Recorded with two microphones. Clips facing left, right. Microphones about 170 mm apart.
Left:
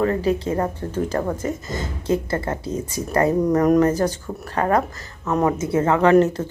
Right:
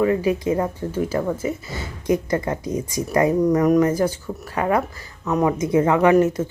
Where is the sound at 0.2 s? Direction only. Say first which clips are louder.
Right 1 dB; 10° right (ahead or behind).